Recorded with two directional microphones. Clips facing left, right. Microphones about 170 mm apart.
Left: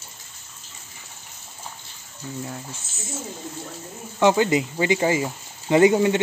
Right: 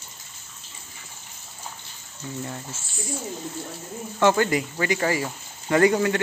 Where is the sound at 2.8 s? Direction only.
25° left (ahead or behind).